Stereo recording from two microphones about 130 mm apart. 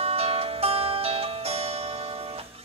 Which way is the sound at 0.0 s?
50° right (ahead or behind).